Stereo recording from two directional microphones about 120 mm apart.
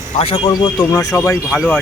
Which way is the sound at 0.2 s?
50° left (ahead or behind).